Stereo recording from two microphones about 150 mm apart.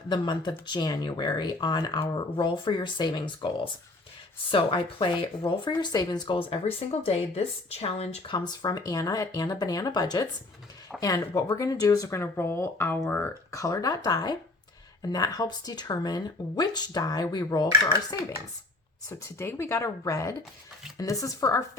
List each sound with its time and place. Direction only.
0.1 s speech: 30° left (ahead or behind)
8.3 s speech: 25° left (ahead or behind)